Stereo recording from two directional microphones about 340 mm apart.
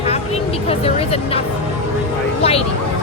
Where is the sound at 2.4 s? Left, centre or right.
Centre.